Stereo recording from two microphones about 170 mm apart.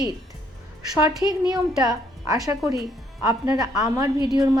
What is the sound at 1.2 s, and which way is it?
Speech, 10° right (ahead or behind).